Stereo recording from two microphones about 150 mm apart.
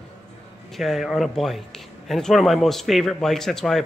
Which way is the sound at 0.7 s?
Centre (ahead or behind).